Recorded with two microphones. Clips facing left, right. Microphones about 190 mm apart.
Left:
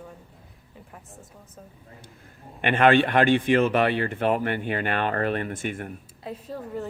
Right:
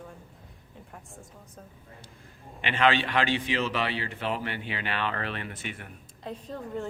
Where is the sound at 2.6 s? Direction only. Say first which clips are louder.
Left 6 dB; 55° left (ahead or behind).